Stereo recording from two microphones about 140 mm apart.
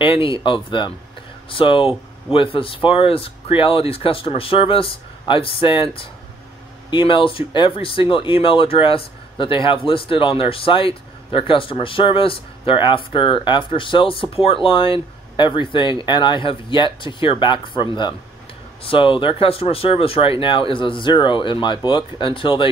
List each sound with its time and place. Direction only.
0.0 s speech: 40° left (ahead or behind)